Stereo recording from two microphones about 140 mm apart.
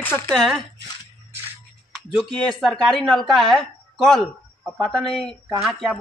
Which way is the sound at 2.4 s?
5° left (ahead or behind).